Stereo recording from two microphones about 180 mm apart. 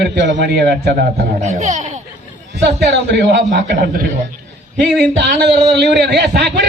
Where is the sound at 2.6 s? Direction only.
70° right (ahead or behind).